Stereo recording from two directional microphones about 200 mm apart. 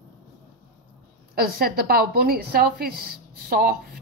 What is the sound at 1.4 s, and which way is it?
A woman's voice, 45° right (ahead or behind).